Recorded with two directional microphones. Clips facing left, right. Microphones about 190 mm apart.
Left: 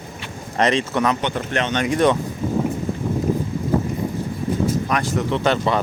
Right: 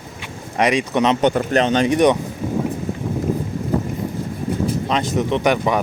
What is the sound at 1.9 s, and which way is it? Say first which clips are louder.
Speech: right 1 dB; 15° right (ahead or behind).